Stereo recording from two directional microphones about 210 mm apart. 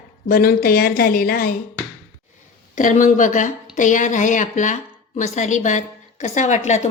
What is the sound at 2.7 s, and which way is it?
A woman's voice, 35° left (ahead or behind).